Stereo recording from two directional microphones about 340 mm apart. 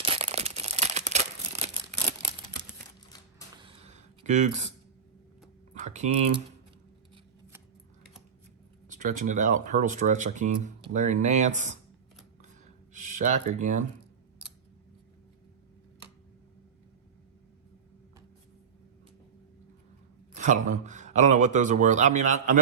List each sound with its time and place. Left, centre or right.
0.0 s tearing: centre
3.5 s a sound: centre
5.7 s typing: right
8.9 s speech: right
12.9 s speech: right
20.3 s speech: right